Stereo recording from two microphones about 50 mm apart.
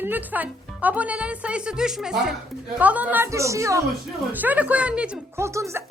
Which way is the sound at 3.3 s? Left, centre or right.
Right.